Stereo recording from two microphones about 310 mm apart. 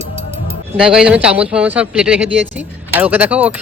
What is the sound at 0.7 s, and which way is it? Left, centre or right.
Speech, centre.